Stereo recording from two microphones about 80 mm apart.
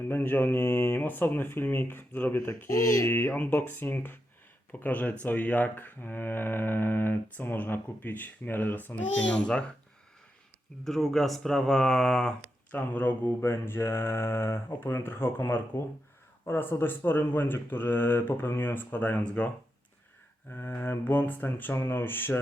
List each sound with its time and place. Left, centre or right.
0.1 s speech: left
2.6 s speech: left
3.1 s speech: left
10.8 s speech: centre
12.7 s speech: left
20.5 s speech: left